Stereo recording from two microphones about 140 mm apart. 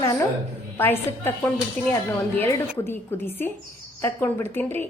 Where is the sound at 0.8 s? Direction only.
15° left (ahead or behind).